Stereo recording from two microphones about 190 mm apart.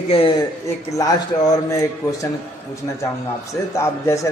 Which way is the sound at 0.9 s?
20° left (ahead or behind).